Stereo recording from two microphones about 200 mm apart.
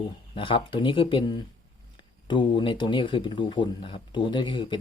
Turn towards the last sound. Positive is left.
turn(degrees=25)  # may be behind; listen again after turning